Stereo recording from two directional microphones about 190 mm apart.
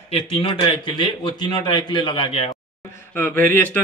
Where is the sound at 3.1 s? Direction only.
10° left (ahead or behind).